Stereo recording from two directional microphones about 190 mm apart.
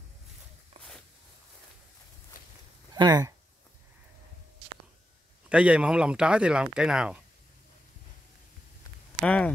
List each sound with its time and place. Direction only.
2.9 s speech: 20° right (ahead or behind)
5.5 s speech: 5° right (ahead or behind)
9.2 s speech: 5° left (ahead or behind)